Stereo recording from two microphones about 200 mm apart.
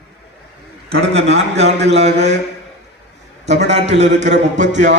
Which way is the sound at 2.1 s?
60° right (ahead or behind).